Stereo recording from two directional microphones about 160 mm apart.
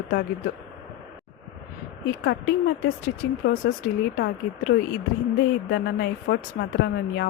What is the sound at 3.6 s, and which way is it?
Speech, 90° left.